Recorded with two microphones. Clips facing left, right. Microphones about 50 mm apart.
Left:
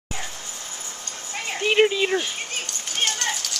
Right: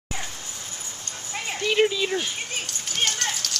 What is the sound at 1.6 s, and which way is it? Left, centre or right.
Speech, left.